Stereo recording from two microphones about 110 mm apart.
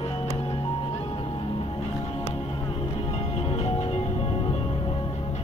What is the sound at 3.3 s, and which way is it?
Music, 80° left.